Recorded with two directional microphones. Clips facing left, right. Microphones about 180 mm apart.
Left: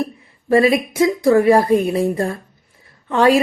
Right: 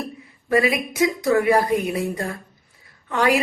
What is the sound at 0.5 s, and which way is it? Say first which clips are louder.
Speech: left 6 dB; 30° left (ahead or behind).